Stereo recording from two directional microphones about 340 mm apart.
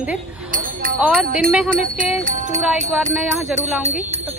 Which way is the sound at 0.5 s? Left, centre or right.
Right.